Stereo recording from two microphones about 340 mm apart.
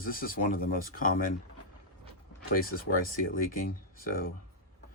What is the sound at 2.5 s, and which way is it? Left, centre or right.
Speech, left.